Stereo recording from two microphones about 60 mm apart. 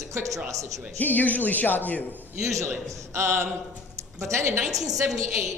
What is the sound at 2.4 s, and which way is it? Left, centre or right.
Speech, right.